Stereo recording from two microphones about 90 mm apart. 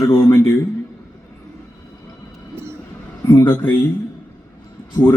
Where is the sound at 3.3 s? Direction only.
45° left (ahead or behind).